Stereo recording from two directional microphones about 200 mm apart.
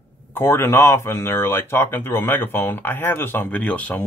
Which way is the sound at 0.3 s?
10° left (ahead or behind).